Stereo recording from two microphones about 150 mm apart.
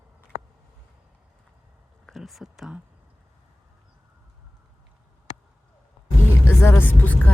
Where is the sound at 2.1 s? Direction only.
Centre (ahead or behind).